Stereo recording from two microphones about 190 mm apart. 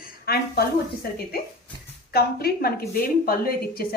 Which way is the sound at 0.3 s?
55° left (ahead or behind).